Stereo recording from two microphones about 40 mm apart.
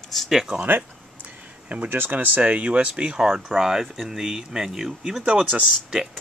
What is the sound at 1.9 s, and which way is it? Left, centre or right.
Speech, right.